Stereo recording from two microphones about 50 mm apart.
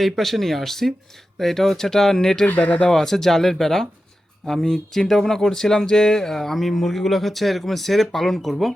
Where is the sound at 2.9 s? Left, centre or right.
Centre.